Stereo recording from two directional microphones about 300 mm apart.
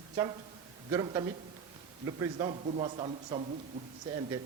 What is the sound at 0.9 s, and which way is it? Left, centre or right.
Speech, centre.